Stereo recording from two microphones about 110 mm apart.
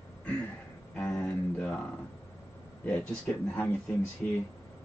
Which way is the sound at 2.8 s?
10° left (ahead or behind).